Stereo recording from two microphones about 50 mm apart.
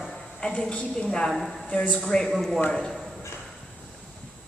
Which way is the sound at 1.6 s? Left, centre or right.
Left.